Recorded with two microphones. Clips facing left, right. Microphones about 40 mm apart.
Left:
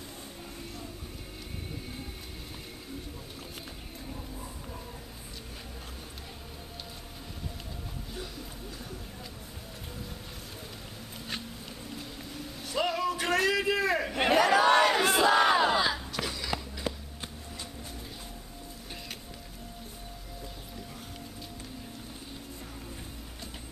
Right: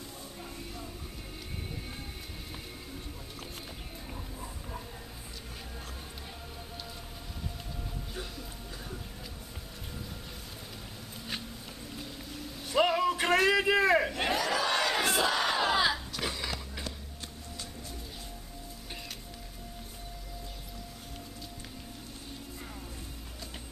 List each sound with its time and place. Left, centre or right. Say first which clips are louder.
4.1 s a sound: left 1 dB; centre
11.9 s boat: right 1 dB; centre
12.6 s vehicle: right 3 dB; centre
14.1 s battle cry: left 4 dB; centre
14.3 s crowd: left 10 dB; left
15.0 s battle cry: left 4 dB; centre
15.3 s battle cry: left 7 dB; left
15.6 s crowd: left 1 dB; centre
16.2 s a sound: right 1 dB; centre
16.9 s a sound: left 10 dB; centre